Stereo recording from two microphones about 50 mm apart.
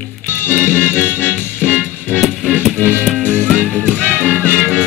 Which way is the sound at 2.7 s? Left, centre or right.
Left.